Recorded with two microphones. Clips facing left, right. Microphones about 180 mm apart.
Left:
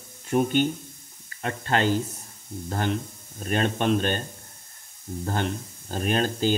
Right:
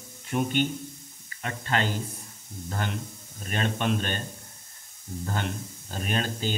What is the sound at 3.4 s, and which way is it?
Speech, 45° left (ahead or behind).